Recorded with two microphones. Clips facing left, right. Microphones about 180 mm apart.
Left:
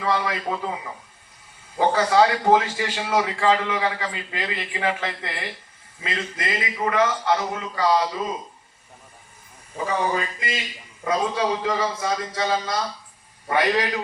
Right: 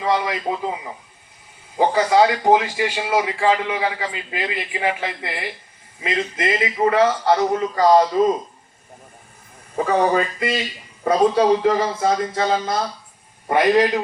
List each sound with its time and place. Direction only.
0.0 s a man's voice: 15° right (ahead or behind)
1.8 s a man's voice: 15° right (ahead or behind); by 8.2 s 45° right (ahead or behind)
9.7 s speech: 55° right (ahead or behind)
11.1 s a man's voice: 35° right (ahead or behind)
12.0 s speech: 50° right (ahead or behind)